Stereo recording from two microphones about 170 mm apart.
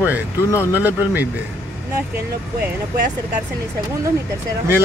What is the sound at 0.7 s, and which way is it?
Speech, 10° right (ahead or behind).